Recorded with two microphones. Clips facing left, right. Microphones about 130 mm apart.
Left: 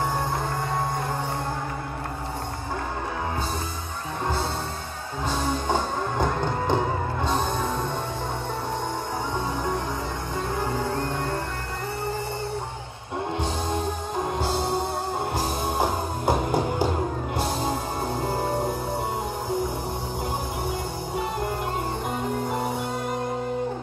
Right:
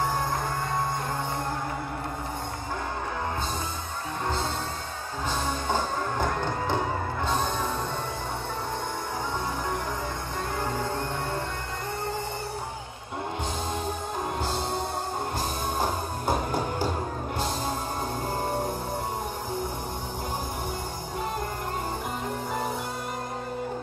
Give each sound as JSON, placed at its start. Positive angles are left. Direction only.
{"t": 5.7, "sound": "music", "side_deg": 15}
{"t": 15.8, "sound": "music", "side_deg": 15}